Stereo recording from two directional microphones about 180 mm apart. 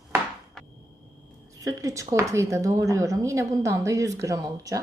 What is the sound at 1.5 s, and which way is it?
A woman's voice, 20° right (ahead or behind).